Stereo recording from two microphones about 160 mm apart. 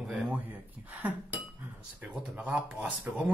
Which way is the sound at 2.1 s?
10° right (ahead or behind).